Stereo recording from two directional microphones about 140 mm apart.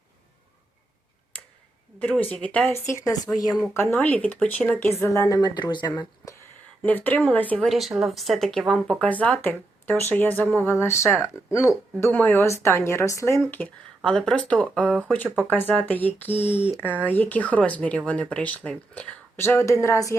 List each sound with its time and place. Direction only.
2.0 s speech: 10° left (ahead or behind)
2.9 s speech: 25° left (ahead or behind)
3.8 s speech: 10° left (ahead or behind); by 5.9 s 30° left (ahead or behind)
6.8 s speech: 10° left (ahead or behind)
7.7 s speech: centre (ahead or behind)
16.4 s speech: 50° left (ahead or behind)
17.0 s speech: 10° left (ahead or behind)